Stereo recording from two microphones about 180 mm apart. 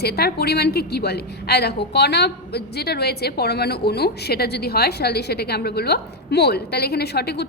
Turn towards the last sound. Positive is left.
turn(degrees=65)  # may be behind; listen again after turning